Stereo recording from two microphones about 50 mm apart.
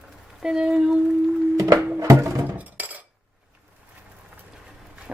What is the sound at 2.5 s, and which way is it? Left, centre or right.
Chink, right.